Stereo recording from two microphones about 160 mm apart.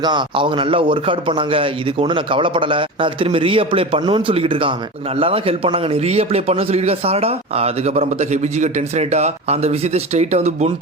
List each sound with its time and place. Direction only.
0.0 s a man's voice: 30° right (ahead or behind)